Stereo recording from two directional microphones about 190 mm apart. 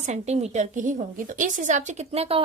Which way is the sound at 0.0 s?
35° right (ahead or behind).